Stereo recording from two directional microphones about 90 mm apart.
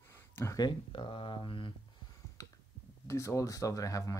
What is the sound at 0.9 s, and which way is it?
Speech, 80° left.